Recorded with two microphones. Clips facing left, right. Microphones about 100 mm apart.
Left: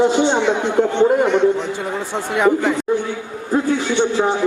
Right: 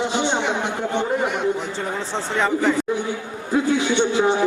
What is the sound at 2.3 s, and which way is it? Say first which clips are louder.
Speech: left 4 dB; 5° left (ahead or behind).